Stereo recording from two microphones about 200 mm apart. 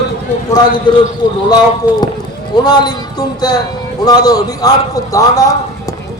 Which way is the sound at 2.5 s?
20° left (ahead or behind).